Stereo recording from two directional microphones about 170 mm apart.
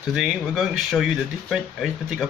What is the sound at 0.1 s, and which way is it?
Speech, 5° right (ahead or behind).